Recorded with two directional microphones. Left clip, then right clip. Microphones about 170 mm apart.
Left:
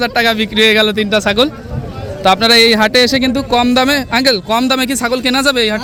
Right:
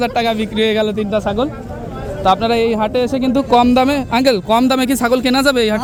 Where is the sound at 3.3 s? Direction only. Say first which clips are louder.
Right 1 dB; 5° right (ahead or behind).